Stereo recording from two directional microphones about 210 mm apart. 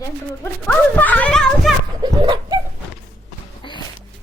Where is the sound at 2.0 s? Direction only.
20° right (ahead or behind).